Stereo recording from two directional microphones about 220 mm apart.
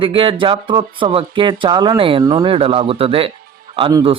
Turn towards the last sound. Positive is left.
turn(degrees=-25)  # may be behind; listen again after turning